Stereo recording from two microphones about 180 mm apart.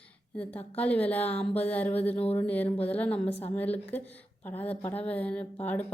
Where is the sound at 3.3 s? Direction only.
35° left (ahead or behind).